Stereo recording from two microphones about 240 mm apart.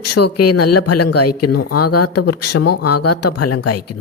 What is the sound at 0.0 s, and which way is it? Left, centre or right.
Speech, left.